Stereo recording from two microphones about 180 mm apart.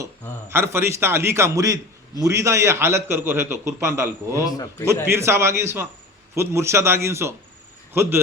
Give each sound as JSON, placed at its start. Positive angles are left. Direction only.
{"t": 0.0, "sound": "a man's voice", "side_deg": -15}
{"t": 4.4, "sound": "a man's voice", "side_deg": 20}
{"t": 5.0, "sound": "a man's voice", "side_deg": -15}